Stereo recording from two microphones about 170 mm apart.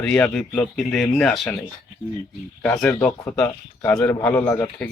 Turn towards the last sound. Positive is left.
turn(degrees=15)  # may be behind; listen again after turning